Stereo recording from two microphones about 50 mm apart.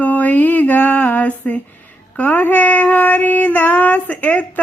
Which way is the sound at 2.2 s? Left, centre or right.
Left.